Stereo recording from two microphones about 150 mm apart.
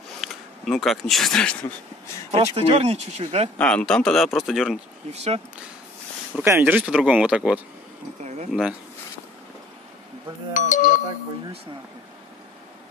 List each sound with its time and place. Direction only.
0.2 s speech: centre (ahead or behind)
2.5 s speech: 45° right (ahead or behind)
3.5 s speech: 5° left (ahead or behind)
5.1 s speech: 45° right (ahead or behind)
6.4 s speech: 15° right (ahead or behind)
8.2 s speech: 50° right (ahead or behind)
8.5 s speech: 5° right (ahead or behind)
10.5 s speech: 60° left (ahead or behind)